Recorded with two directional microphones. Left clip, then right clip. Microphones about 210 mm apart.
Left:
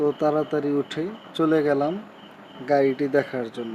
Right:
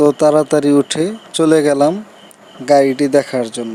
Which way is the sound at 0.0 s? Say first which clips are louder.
Right 11 dB; 50° right (ahead or behind).